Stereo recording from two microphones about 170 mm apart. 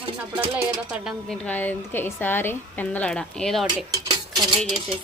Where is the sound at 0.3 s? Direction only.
10° right (ahead or behind).